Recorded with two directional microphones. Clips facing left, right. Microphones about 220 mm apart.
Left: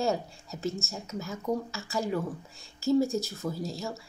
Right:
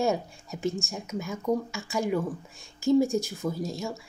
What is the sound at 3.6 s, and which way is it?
Speech, 15° right (ahead or behind).